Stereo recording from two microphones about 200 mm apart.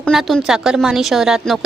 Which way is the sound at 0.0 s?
Centre (ahead or behind).